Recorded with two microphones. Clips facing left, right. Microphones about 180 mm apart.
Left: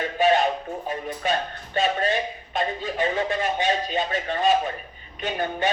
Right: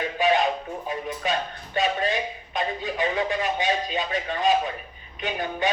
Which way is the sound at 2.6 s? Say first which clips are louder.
Left 1 dB; 40° left (ahead or behind).